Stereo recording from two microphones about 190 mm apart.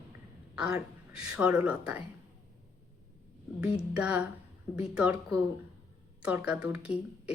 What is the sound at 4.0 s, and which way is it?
Speech, 5° right (ahead or behind).